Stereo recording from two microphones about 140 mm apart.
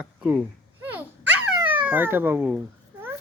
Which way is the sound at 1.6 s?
10° right (ahead or behind).